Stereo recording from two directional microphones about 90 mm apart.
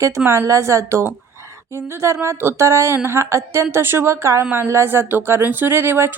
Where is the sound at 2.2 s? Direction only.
30° right (ahead or behind).